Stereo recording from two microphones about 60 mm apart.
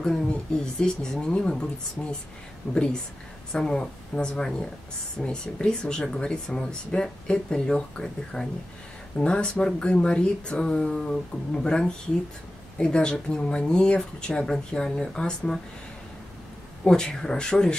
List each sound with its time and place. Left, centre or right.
0.0 s speech: centre
2.7 s speech: centre
16.8 s speech: centre